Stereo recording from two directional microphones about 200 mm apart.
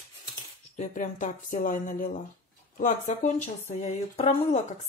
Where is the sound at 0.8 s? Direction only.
40° left (ahead or behind).